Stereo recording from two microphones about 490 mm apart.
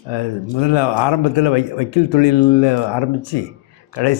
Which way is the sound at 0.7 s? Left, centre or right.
Left.